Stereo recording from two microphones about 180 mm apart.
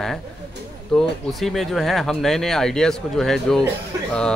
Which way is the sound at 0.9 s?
Centre (ahead or behind).